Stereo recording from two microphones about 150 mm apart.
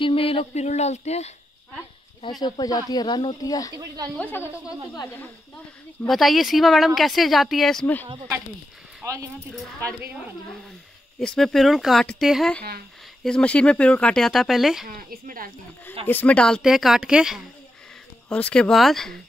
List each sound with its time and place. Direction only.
0.0 s speech: 40° left (ahead or behind)
2.4 s speech: 25° left (ahead or behind)
3.7 s speech: 25° right (ahead or behind)
4.1 s speech: 10° left (ahead or behind)
6.0 s speech: centre (ahead or behind)
7.8 s speech: 10° left (ahead or behind)
9.0 s a woman's voice: 20° right (ahead or behind)
11.1 s speech: centre (ahead or behind)
14.9 s speech: 70° right (ahead or behind)
16.1 s speech: 10° left (ahead or behind)
18.3 s speech: 5° left (ahead or behind)